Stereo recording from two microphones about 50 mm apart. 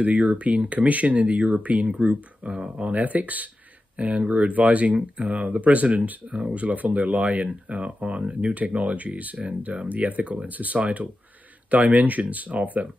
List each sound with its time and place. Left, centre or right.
0.0 s speech: right
2.4 s speech: centre
2.8 s speech: right